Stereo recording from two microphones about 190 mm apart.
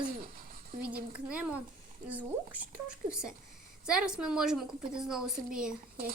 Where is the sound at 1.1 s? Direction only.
5° right (ahead or behind).